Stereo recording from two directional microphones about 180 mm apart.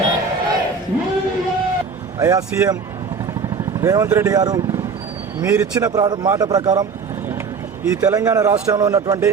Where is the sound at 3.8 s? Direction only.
15° right (ahead or behind).